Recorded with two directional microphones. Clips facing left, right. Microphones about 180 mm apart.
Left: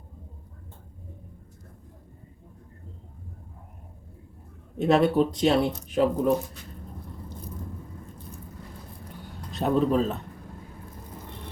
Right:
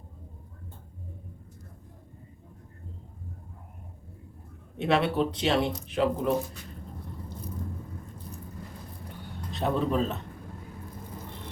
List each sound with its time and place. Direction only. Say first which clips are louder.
4.8 s speech: left 5 dB; 40° left (ahead or behind)
9.6 s speech: left 4 dB; 40° left (ahead or behind)